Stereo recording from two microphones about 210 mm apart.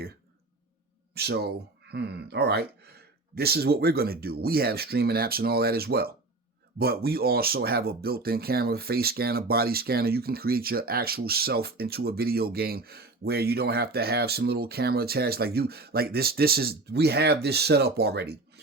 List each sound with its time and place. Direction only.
1.1 s speech: 50° right (ahead or behind)